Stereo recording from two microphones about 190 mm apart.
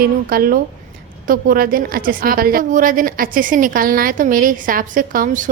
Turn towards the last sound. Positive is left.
turn(degrees=-45)  # may be behind; listen again after turning